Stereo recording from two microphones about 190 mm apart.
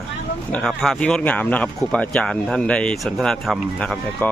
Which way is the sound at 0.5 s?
Centre (ahead or behind).